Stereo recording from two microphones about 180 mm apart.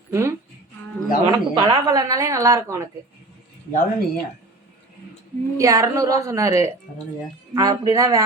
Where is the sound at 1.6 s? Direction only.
20° right (ahead or behind).